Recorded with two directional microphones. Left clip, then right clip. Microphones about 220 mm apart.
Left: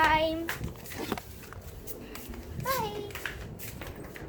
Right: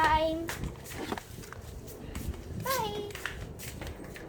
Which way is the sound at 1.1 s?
30° left (ahead or behind).